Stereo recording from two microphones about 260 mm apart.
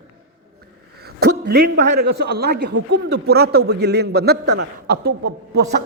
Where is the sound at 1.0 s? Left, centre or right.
Right.